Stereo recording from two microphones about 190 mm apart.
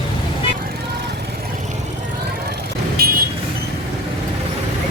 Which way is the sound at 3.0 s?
50° right (ahead or behind).